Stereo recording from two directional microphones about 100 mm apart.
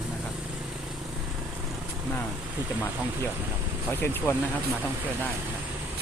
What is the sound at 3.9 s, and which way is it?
Speech, 20° left (ahead or behind).